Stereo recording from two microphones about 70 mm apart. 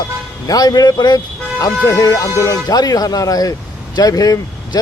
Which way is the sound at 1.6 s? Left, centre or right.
Left.